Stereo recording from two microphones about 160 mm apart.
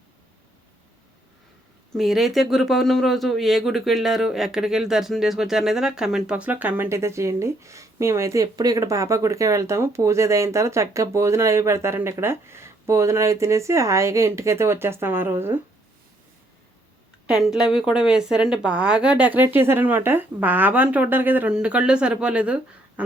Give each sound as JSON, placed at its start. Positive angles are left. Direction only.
{"t": 2.0, "sound": "speech", "side_deg": 0}
{"t": 17.2, "sound": "speech", "side_deg": -5}
{"t": 23.0, "sound": "a sound", "side_deg": -10}